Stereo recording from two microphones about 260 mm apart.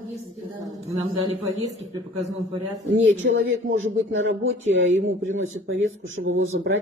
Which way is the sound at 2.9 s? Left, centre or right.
Right.